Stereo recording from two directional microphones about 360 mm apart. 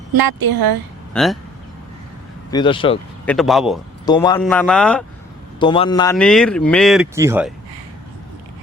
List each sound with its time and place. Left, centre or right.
0.1 s speech: right
1.1 s speech: centre
2.5 s speech: centre
3.2 s speech: centre
4.0 s speech: centre
5.5 s speech: centre